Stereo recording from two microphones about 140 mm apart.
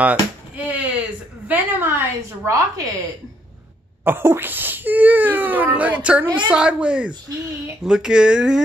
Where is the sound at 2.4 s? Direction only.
25° right (ahead or behind).